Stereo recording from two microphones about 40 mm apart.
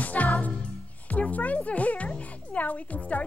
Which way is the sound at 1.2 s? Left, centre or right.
Left.